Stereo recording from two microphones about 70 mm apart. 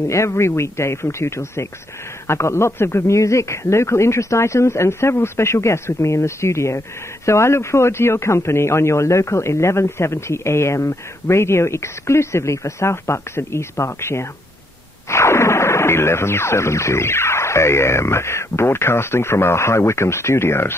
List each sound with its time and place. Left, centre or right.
0.1 s speech: left